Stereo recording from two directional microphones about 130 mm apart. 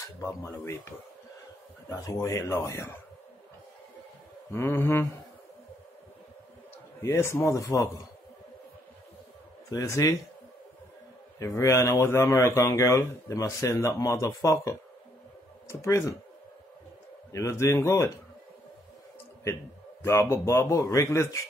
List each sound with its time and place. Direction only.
0.4 s speech: 20° left (ahead or behind)
4.5 s mantra: 20° left (ahead or behind)
7.0 s speech: 20° left (ahead or behind)
9.7 s speech: 25° left (ahead or behind)
11.3 s speech: 25° left (ahead or behind)
17.3 s speech: 25° left (ahead or behind)
20.0 s speech: 20° left (ahead or behind)